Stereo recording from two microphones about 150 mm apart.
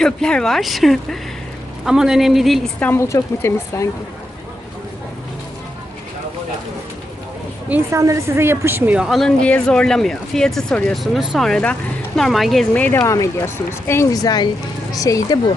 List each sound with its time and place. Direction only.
0.0 s a woman's voice: 5° left (ahead or behind)
2.8 s speech: 15° left (ahead or behind)
7.7 s a woman's voice: 20° right (ahead or behind); by 13.0 s 10° left (ahead or behind)
13.0 s speech: 20° left (ahead or behind)